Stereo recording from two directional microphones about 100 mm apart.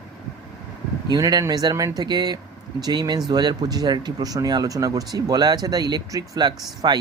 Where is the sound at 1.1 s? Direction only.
40° right (ahead or behind).